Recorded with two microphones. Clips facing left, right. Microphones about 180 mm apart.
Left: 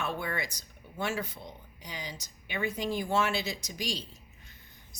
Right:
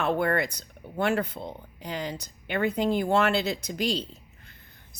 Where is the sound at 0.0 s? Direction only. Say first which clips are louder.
Right 9 dB; 60° right (ahead or behind).